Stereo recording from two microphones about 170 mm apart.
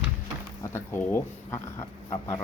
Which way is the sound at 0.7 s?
10° left (ahead or behind).